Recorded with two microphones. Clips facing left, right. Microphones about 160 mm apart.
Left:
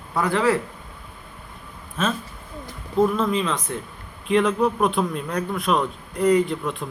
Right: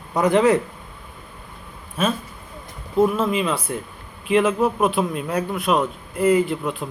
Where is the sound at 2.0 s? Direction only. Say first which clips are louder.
Right 2 dB; 10° right (ahead or behind).